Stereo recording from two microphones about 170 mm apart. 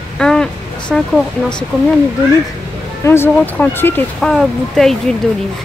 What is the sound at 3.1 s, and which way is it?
Speech, 10° left (ahead or behind).